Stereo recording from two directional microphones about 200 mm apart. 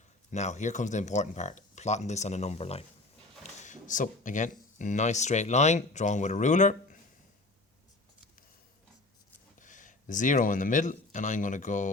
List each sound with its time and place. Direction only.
0.3 s speech: 35° left (ahead or behind)
9.6 s speech: 40° left (ahead or behind)